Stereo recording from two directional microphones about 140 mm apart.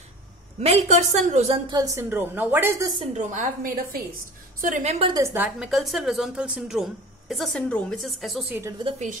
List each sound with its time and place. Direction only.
0.6 s a woman's voice: 50° right (ahead or behind)
1.7 s a woman's voice: 25° right (ahead or behind)
3.1 s a woman's voice: 60° right (ahead or behind)
5.1 s a woman's voice: 20° right (ahead or behind)
5.6 s a woman's voice: centre (ahead or behind)